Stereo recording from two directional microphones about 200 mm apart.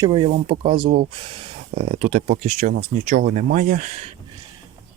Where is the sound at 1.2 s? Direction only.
25° right (ahead or behind).